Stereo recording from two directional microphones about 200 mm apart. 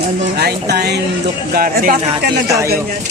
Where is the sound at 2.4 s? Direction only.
15° right (ahead or behind).